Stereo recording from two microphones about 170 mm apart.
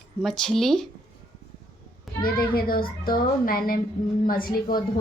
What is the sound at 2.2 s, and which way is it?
A woman's voice, 60° left (ahead or behind).